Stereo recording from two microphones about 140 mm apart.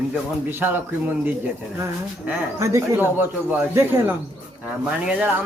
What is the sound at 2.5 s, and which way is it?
Speech, 20° right (ahead or behind).